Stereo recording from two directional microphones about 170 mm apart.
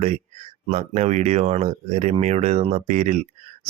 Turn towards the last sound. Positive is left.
turn(degrees=-40)  # may be behind; listen again after turning